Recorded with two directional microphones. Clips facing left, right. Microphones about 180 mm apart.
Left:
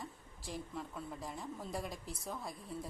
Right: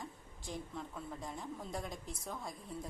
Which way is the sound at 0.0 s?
Centre (ahead or behind).